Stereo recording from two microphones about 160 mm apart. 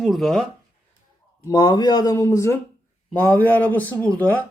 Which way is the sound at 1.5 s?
25° left (ahead or behind).